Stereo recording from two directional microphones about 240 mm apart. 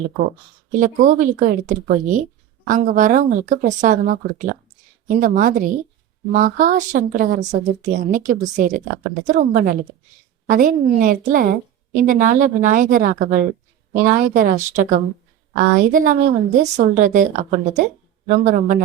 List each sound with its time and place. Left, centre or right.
0.7 s speech: right